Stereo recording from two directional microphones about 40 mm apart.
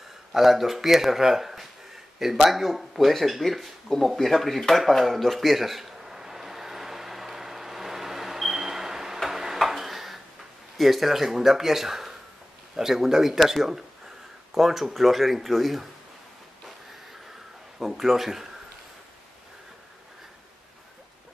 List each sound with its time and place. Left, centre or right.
0.3 s speech: centre
4.2 s a sound: centre
9.2 s tick-tock: centre
9.6 s dishes: centre
10.8 s speech: centre
17.7 s speech: centre